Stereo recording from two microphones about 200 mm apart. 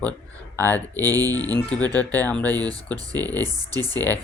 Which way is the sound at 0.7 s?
15° right (ahead or behind).